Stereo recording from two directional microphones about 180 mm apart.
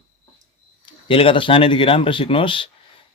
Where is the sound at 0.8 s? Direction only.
30° left (ahead or behind).